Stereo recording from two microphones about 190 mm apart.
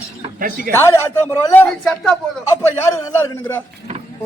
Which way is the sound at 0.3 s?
50° right (ahead or behind).